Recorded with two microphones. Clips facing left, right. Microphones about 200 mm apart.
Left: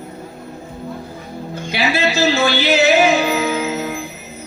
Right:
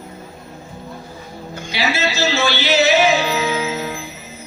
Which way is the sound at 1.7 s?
55° left (ahead or behind).